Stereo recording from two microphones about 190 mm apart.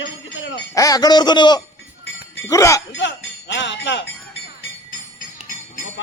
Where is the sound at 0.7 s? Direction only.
20° left (ahead or behind).